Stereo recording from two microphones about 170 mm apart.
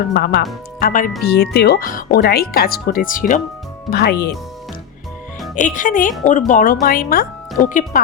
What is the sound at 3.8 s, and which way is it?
Speech, 70° left (ahead or behind).